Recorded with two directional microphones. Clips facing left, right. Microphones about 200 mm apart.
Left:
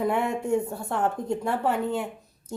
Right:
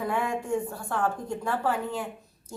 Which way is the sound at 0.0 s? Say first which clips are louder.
Left 4 dB; 25° left (ahead or behind).